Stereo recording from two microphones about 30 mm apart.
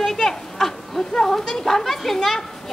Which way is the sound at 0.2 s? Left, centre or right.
Centre.